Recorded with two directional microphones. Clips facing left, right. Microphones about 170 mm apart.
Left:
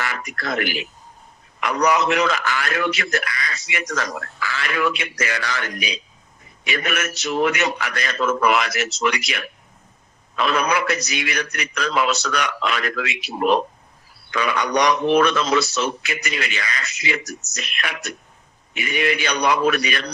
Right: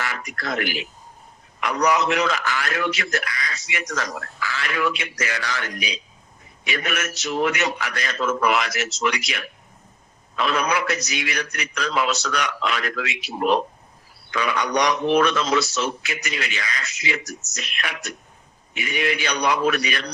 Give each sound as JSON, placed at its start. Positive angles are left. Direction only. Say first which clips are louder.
{"t": 0.0, "sound": "a man's voice", "louder": "left 2 dB", "side_deg": 60}